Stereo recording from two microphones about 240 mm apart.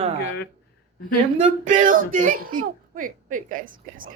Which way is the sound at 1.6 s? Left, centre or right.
Right.